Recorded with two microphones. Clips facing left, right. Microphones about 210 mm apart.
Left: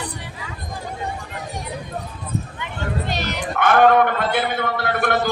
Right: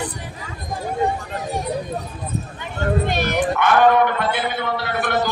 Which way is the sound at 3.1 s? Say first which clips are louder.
Right 5 dB; 55° right (ahead or behind).